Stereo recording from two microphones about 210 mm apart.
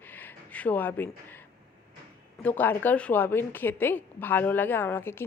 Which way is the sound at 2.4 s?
10° left (ahead or behind).